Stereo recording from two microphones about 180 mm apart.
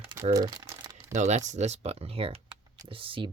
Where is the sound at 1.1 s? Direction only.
40° right (ahead or behind).